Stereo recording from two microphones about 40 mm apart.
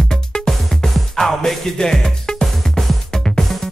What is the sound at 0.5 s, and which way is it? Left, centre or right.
Music, centre.